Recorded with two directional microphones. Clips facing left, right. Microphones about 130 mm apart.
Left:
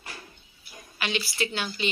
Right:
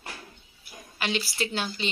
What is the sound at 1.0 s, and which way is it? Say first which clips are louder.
Speech: even; 35° right (ahead or behind).